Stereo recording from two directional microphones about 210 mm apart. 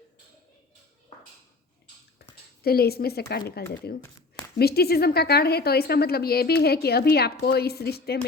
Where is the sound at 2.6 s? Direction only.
45° left (ahead or behind).